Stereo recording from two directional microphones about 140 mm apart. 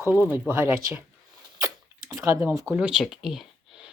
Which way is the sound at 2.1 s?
20° right (ahead or behind).